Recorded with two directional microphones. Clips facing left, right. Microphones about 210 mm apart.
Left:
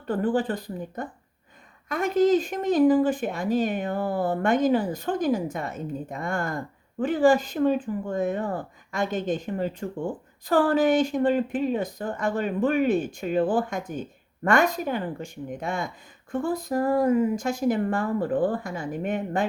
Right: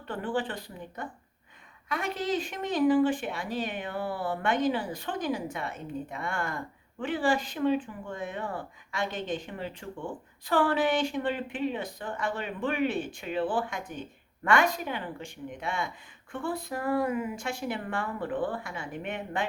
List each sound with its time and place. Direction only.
0.1 s speech: 40° left (ahead or behind)